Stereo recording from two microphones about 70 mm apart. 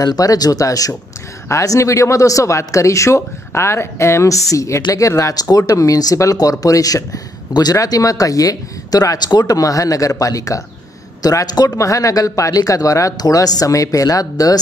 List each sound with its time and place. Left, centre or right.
0.0 s speech: left
9.2 s speech: left
11.2 s speech: left